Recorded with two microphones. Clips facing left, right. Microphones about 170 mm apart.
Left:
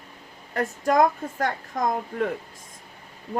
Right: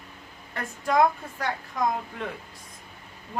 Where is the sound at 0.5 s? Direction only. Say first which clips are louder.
Left 3 dB; 45° left (ahead or behind).